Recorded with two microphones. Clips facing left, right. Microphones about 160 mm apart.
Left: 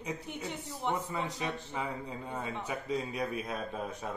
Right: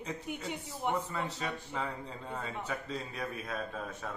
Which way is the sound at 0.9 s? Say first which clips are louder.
Even; 15° left (ahead or behind).